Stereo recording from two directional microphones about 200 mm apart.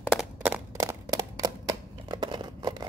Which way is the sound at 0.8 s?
15° right (ahead or behind).